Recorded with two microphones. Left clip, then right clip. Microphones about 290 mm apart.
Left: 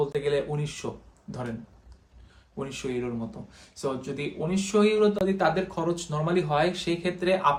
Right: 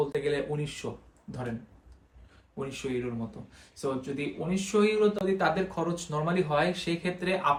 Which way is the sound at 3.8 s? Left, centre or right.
Centre.